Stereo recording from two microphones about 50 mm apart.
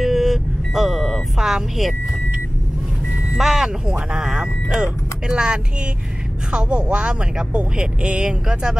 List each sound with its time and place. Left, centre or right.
0.0 s vehicle: centre
3.3 s speech: centre